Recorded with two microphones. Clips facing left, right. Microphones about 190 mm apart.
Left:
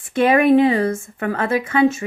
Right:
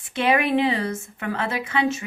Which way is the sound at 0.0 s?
50° left (ahead or behind).